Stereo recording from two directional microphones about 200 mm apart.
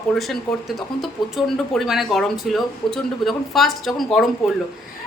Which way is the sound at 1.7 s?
Centre (ahead or behind).